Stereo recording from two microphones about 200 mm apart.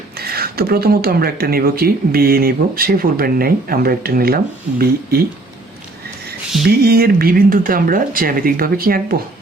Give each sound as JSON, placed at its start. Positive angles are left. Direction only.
{"t": 0.2, "sound": "speech", "side_deg": -50}
{"t": 6.7, "sound": "speech", "side_deg": -50}